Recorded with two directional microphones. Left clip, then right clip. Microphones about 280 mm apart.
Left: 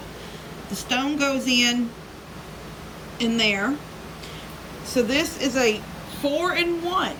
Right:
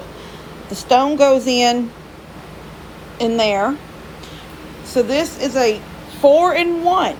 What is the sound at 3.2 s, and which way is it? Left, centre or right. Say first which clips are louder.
Speech: right 6 dB; centre.